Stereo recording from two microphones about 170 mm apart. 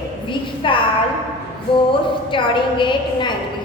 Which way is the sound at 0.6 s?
30° left (ahead or behind).